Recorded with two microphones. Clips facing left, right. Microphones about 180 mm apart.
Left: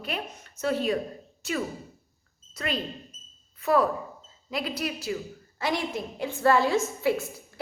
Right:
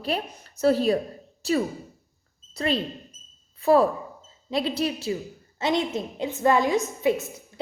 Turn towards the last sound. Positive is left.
turn(degrees=-20)  # may be behind; listen again after turning